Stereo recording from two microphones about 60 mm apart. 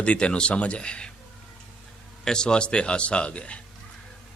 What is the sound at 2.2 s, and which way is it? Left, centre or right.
A man's voice, centre.